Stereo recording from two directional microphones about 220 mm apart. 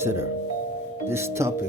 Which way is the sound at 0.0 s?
10° right (ahead or behind).